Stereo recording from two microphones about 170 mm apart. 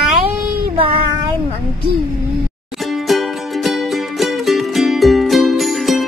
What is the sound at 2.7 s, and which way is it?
Music, centre (ahead or behind).